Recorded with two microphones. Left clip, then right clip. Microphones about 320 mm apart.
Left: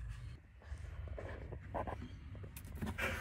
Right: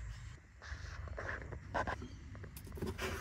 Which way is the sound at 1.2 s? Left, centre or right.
Centre.